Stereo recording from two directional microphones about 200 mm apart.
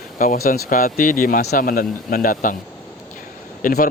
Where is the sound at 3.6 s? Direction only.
45° left (ahead or behind).